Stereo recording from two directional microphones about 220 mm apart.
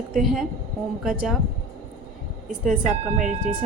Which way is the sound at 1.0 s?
Centre (ahead or behind).